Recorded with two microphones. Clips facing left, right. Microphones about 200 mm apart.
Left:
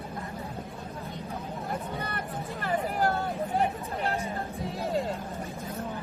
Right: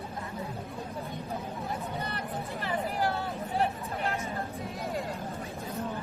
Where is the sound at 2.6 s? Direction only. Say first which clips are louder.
Left 3 dB; 50° left (ahead or behind).